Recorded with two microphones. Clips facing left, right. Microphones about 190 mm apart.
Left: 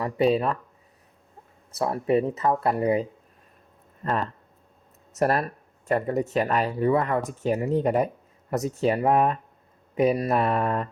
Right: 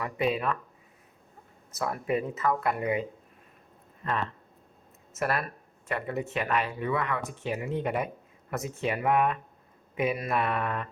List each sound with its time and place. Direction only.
0.0 s speech: 35° left (ahead or behind)
1.7 s speech: 35° left (ahead or behind)